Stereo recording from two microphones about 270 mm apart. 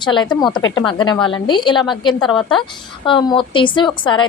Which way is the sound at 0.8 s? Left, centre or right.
Centre.